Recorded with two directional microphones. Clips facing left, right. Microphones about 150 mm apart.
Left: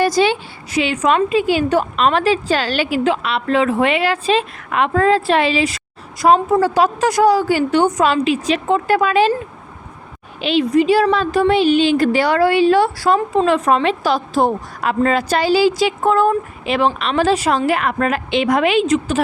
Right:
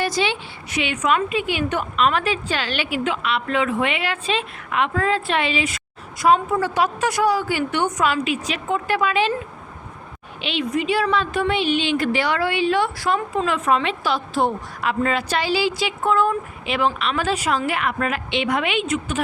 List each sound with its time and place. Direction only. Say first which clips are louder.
0.0 s a woman's voice: left 7 dB; 40° left (ahead or behind)
10.4 s a woman's voice: left 9 dB; 35° left (ahead or behind)